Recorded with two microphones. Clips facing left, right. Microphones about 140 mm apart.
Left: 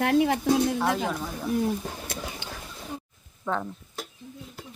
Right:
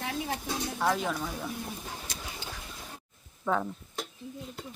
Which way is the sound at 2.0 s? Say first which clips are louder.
Left 6 dB; 60° left (ahead or behind).